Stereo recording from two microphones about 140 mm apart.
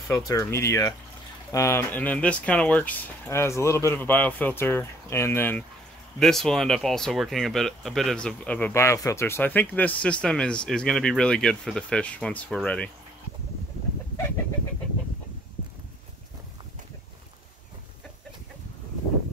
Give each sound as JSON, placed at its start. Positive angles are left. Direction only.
{"t": 0.1, "sound": "speech", "side_deg": 25}
{"t": 6.1, "sound": "speech", "side_deg": 5}